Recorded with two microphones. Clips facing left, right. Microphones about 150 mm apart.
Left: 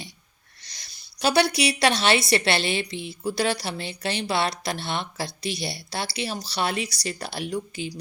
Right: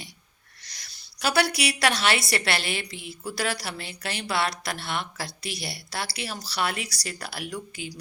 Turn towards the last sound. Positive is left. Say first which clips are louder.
# left 5 dB
turn(degrees=25)  # may be behind; listen again after turning